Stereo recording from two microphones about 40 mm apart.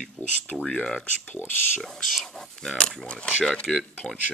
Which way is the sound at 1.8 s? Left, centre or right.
Centre.